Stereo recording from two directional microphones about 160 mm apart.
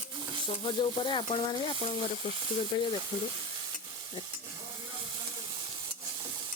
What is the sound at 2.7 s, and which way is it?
Frying, 25° left (ahead or behind).